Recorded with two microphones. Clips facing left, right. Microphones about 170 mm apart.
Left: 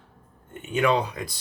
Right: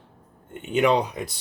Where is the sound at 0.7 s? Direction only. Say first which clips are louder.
Right 2 dB; 20° right (ahead or behind).